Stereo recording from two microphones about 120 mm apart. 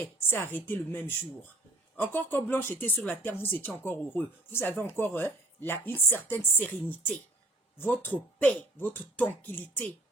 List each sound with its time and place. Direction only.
0.0 s speech: 20° left (ahead or behind)